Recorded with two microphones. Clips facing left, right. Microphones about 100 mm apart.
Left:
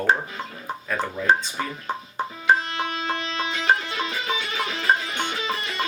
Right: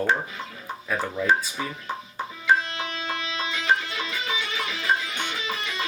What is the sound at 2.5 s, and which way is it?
Music, 45° left (ahead or behind).